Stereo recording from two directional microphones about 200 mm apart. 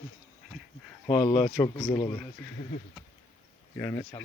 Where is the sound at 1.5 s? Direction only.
10° left (ahead or behind).